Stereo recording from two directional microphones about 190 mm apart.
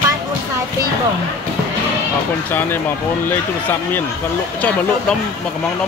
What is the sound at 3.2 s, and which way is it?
Speech, 10° left (ahead or behind).